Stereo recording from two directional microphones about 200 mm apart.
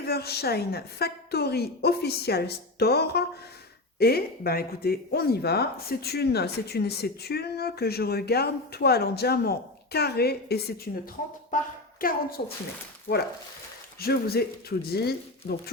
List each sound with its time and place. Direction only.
0.0 s a woman's voice: 50° left (ahead or behind)
14.0 s speech: 50° left (ahead or behind)